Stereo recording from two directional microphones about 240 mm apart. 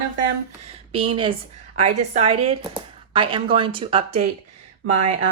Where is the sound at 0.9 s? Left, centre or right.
Right.